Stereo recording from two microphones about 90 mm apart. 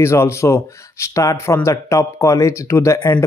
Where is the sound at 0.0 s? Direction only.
30° left (ahead or behind).